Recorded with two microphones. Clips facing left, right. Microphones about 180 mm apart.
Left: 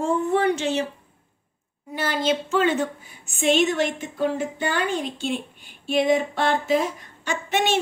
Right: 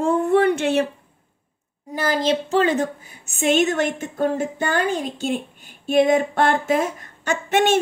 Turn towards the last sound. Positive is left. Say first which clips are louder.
# right 5 dB
turn(degrees=-50)  # may be behind; listen again after turning